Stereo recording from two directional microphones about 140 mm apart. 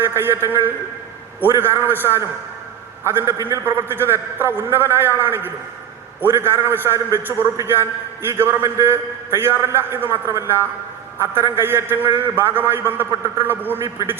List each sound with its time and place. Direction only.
0.0 s a man's voice: 15° right (ahead or behind)